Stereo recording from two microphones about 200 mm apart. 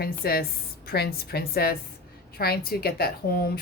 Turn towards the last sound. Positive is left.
turn(degrees=50)  # may be behind; listen again after turning